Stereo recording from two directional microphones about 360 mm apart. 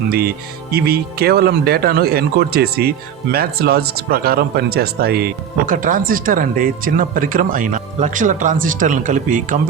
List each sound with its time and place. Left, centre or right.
0.1 s speech: right